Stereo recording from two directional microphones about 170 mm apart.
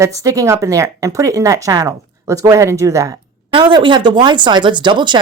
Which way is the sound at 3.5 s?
30° right (ahead or behind).